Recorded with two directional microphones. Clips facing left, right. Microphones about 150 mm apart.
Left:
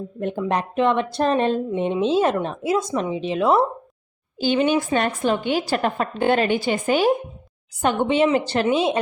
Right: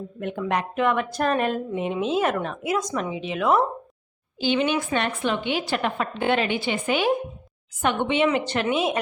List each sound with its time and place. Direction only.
0.2 s speech: 30° left (ahead or behind)
4.4 s a woman's voice: 40° left (ahead or behind)